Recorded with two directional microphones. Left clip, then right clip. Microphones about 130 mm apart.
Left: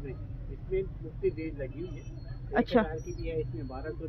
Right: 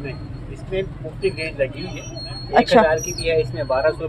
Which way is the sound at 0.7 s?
45° right (ahead or behind).